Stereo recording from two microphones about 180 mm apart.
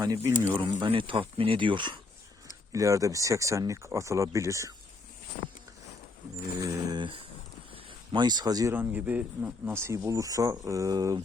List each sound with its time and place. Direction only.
0.0 s speech: 15° right (ahead or behind)
0.8 s speech: 30° right (ahead or behind)
5.3 s a sound: 45° left (ahead or behind)
6.6 s speech: 20° right (ahead or behind)